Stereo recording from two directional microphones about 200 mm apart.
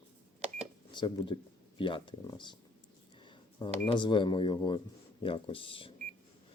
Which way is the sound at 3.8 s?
25° left (ahead or behind).